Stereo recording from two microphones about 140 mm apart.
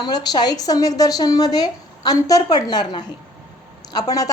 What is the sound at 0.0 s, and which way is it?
A woman's voice, 30° left (ahead or behind).